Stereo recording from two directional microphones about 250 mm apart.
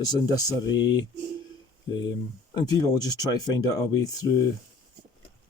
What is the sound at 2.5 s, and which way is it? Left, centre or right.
Speech, centre.